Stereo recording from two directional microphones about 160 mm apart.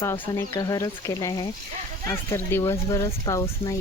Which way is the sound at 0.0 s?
15° left (ahead or behind).